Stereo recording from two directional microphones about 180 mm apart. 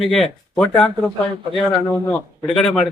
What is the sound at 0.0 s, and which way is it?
Speech, centre (ahead or behind).